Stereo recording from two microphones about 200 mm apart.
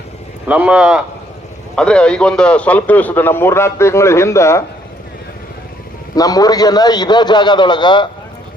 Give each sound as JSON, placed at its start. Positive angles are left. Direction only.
{"t": 0.4, "sound": "a man's voice", "side_deg": -5}
{"t": 6.1, "sound": "a man's voice", "side_deg": 20}